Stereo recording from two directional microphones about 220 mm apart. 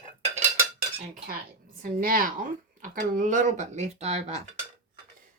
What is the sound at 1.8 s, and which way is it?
Speech, 40° right (ahead or behind).